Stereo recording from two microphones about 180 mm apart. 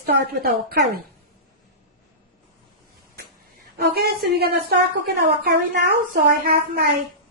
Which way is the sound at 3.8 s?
60° right (ahead or behind).